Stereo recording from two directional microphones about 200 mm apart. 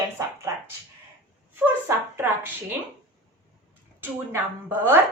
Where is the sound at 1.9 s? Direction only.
15° right (ahead or behind).